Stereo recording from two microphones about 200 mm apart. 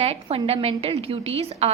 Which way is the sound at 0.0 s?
30° right (ahead or behind).